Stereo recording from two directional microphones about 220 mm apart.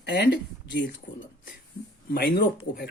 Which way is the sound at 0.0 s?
50° left (ahead or behind).